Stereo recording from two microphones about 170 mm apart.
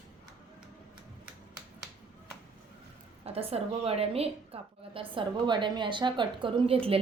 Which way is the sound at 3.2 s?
35° right (ahead or behind).